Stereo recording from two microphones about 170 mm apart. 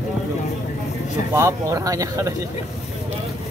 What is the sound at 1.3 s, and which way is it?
Speech, 15° right (ahead or behind).